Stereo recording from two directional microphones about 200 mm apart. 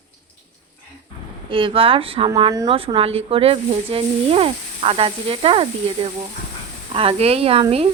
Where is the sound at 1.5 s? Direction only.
25° right (ahead or behind).